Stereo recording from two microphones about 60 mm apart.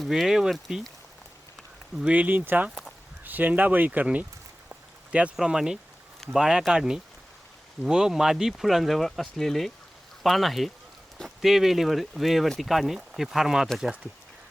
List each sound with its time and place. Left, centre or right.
0.1 s speech: centre
2.1 s speech: right
2.6 s a sound: centre
3.2 s speech: right
4.7 s a sound: right
5.4 s speech: centre